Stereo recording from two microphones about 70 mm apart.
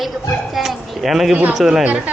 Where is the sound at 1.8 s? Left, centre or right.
Centre.